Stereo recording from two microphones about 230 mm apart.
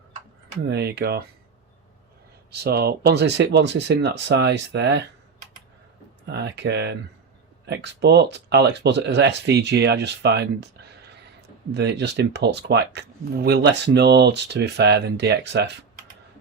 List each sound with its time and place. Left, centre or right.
0.7 s speech: right
2.5 s speech: right
6.2 s speech: right